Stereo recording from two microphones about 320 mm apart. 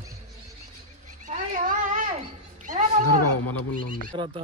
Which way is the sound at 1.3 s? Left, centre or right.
Right.